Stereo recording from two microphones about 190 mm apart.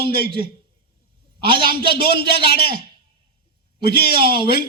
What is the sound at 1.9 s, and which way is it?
Speech, 55° left (ahead or behind).